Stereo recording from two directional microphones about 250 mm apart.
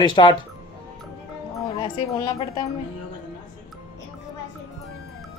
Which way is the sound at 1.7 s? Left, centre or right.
Left.